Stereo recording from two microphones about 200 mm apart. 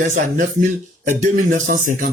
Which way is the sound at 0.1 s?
40° right (ahead or behind).